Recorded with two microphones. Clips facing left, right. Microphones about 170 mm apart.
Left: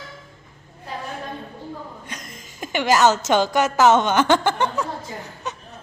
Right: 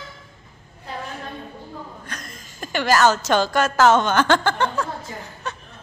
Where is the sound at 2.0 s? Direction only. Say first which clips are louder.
Even; 20° left (ahead or behind).